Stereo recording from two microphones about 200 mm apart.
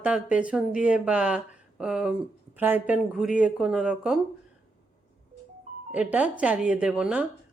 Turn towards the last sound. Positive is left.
turn(degrees=-5)  # may be behind; listen again after turning